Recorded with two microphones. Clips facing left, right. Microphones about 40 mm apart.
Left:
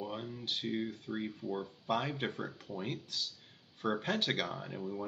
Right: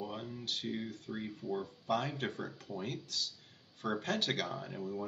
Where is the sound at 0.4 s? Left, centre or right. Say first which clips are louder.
Left 3 dB; centre.